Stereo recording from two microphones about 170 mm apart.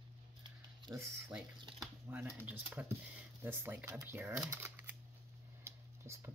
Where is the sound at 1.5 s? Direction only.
25° right (ahead or behind).